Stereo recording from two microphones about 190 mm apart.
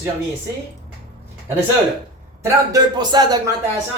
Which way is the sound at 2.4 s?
20° right (ahead or behind).